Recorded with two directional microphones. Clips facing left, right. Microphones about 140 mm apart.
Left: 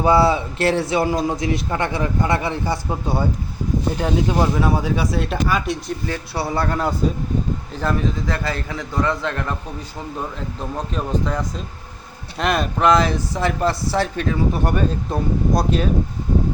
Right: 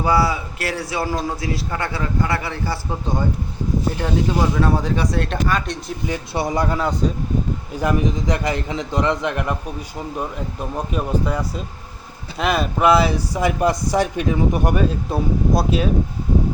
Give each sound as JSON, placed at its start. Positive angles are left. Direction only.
{"t": 0.0, "sound": "a man's voice", "side_deg": 25}
{"t": 3.9, "sound": "speech", "side_deg": 15}
{"t": 6.1, "sound": "speech", "side_deg": -15}
{"t": 10.8, "sound": "speech", "side_deg": -10}